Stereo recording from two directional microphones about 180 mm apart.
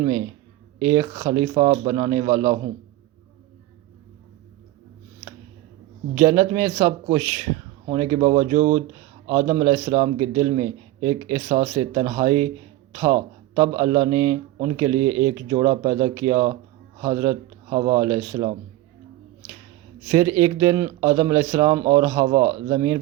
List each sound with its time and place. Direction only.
0.8 s a man's voice: 20° right (ahead or behind)
6.1 s a man's voice: 20° right (ahead or behind)
20.1 s a man's voice: 20° right (ahead or behind)